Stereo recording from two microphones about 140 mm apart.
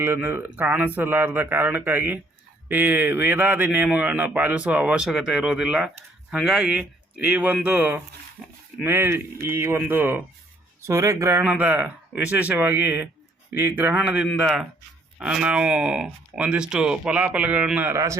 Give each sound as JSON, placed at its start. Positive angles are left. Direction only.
{"t": 0.0, "sound": "a man's voice", "side_deg": -15}
{"t": 8.4, "sound": "speech", "side_deg": 0}
{"t": 8.8, "sound": "a man's voice", "side_deg": -15}